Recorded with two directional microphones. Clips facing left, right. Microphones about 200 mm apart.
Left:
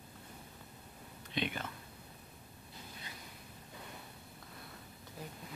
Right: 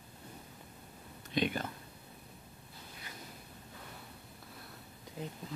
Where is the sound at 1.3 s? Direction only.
40° right (ahead or behind).